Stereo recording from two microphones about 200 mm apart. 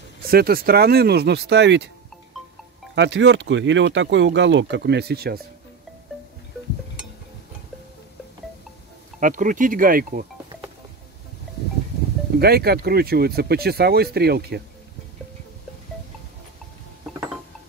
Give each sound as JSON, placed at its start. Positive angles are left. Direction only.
{"t": 0.2, "sound": "speech", "side_deg": -50}
{"t": 2.9, "sound": "speech", "side_deg": -65}
{"t": 9.2, "sound": "speech", "side_deg": -40}
{"t": 12.4, "sound": "speech", "side_deg": -50}